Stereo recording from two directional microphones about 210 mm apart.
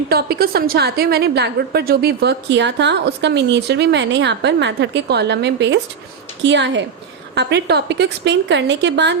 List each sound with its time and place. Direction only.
0.1 s a woman's voice: 50° right (ahead or behind)